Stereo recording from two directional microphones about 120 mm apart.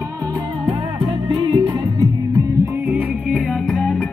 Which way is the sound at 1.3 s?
45° right (ahead or behind).